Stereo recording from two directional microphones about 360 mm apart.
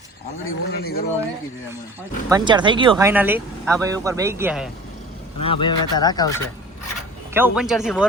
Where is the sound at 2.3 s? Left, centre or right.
Centre.